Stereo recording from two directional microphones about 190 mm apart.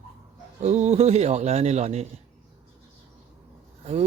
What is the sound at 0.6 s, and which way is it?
A man's voice, 35° right (ahead or behind).